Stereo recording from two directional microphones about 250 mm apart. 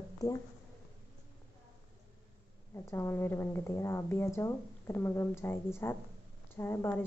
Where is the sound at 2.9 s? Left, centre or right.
Centre.